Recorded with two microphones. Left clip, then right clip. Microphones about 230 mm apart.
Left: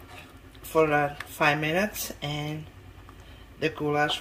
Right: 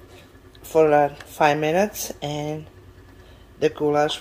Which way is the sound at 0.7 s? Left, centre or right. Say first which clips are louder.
Right 6 dB; centre.